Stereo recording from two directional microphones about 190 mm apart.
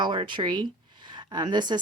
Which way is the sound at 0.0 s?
25° right (ahead or behind).